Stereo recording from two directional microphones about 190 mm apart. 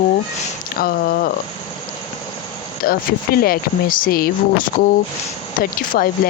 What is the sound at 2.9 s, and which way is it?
Speech, 50° left (ahead or behind).